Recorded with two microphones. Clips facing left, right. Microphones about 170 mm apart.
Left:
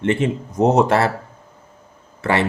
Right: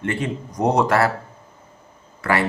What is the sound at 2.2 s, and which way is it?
Speech, 25° left (ahead or behind).